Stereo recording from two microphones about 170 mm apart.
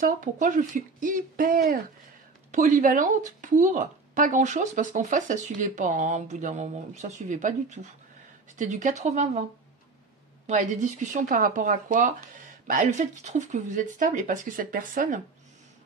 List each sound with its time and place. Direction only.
0.0 s speech: 50° right (ahead or behind)
10.4 s speech: 45° right (ahead or behind)